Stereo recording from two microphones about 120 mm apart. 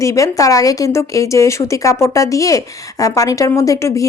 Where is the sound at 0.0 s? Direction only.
25° left (ahead or behind).